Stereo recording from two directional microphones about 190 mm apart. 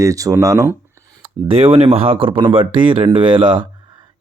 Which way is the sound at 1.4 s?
30° right (ahead or behind).